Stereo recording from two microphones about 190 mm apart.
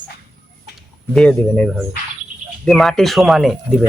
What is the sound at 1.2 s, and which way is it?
Speech, 5° left (ahead or behind).